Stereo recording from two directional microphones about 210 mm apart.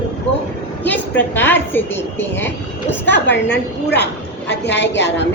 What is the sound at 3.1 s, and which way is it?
A woman's voice, 55° left (ahead or behind).